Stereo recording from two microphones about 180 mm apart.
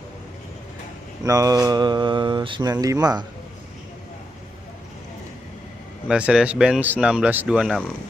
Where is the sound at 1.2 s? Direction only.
20° right (ahead or behind).